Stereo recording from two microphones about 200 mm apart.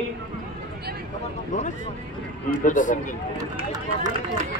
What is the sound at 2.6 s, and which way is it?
Speech, 40° left (ahead or behind).